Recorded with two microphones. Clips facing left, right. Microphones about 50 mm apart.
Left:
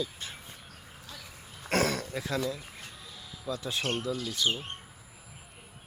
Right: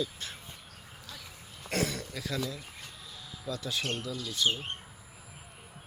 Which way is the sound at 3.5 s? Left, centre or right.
Left.